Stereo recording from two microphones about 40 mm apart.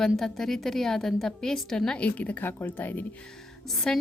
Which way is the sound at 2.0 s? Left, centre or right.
Left.